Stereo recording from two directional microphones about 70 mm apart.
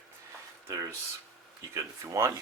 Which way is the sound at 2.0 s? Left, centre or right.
Right.